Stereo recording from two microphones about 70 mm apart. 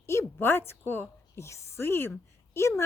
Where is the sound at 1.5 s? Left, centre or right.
Left.